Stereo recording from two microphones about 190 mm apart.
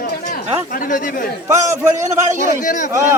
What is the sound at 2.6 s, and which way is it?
Speech, 40° left (ahead or behind).